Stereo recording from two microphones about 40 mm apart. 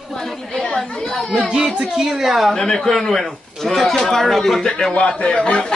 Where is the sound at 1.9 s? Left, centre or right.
Centre.